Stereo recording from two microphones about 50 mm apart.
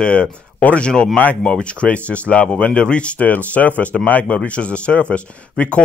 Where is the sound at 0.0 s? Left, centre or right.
Left.